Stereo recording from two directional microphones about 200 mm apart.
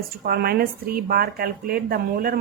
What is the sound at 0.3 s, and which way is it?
A woman's voice, 50° right (ahead or behind).